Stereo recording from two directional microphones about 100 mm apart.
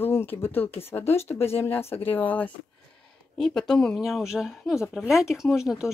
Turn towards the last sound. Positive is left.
turn(degrees=-5)  # may be behind; listen again after turning